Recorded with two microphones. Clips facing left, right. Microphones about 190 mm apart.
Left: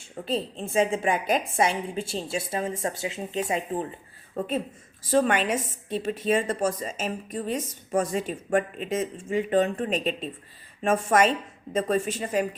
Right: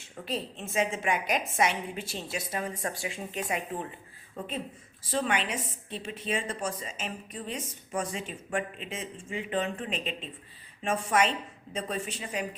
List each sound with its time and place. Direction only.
0.3 s a woman's voice: 30° left (ahead or behind)
4.4 s a woman's voice: 40° left (ahead or behind)